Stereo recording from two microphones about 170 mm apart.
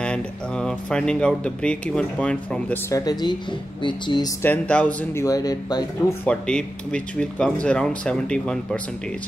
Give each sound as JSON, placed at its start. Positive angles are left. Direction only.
{"t": 0.0, "sound": "speech", "side_deg": 5}
{"t": 2.9, "sound": "speech", "side_deg": 25}
{"t": 4.4, "sound": "speech", "side_deg": 10}
{"t": 5.2, "sound": "speech", "side_deg": 20}
{"t": 6.2, "sound": "speech", "side_deg": 5}